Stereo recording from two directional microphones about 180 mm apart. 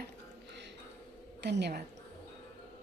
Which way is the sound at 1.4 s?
70° right (ahead or behind).